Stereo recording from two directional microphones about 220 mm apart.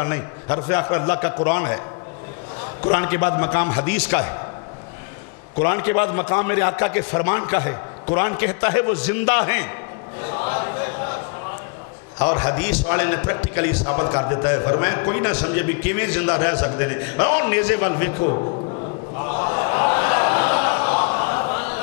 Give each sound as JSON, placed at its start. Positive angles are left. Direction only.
{"t": 0.0, "sound": "a man's voice", "side_deg": 15}
{"t": 2.9, "sound": "a man's voice", "side_deg": 15}
{"t": 5.6, "sound": "a man's voice", "side_deg": 15}
{"t": 12.2, "sound": "a man's voice", "side_deg": 20}
{"t": 13.8, "sound": "a man's voice", "side_deg": 25}
{"t": 19.1, "sound": "a sound", "side_deg": 25}